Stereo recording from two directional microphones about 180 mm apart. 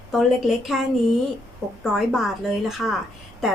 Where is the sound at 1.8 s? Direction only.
Centre (ahead or behind).